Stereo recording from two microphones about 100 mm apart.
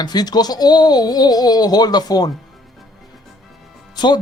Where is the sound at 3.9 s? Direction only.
50° left (ahead or behind).